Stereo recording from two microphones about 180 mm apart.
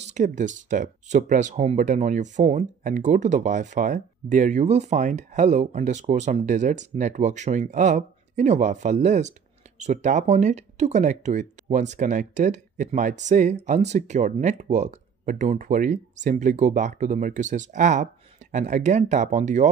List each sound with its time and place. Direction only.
0.0 s speech: 40° right (ahead or behind)